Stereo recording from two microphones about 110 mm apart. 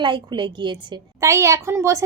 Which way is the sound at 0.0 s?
45° right (ahead or behind).